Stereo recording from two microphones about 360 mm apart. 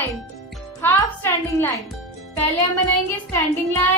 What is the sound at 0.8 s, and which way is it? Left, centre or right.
Speech, centre.